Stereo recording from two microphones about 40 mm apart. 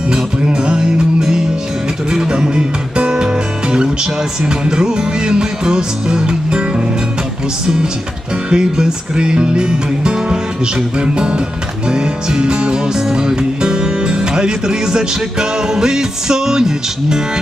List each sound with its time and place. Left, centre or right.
0.1 s music: centre
8.4 s music: right